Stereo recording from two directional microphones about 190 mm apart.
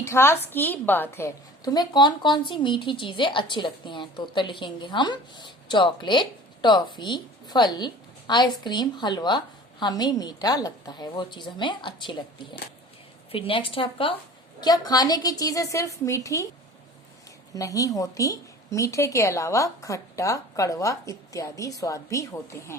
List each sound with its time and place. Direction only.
0.0 s a woman's voice: 15° left (ahead or behind)
17.5 s a woman's voice: 15° left (ahead or behind)